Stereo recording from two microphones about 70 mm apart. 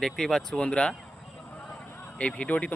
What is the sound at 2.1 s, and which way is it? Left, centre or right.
Speech, centre.